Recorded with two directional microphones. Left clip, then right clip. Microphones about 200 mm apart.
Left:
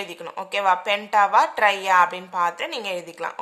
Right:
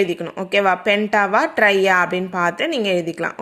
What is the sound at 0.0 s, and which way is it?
A woman's voice, 10° right (ahead or behind).